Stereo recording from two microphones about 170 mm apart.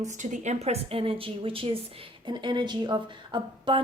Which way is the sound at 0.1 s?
45° right (ahead or behind).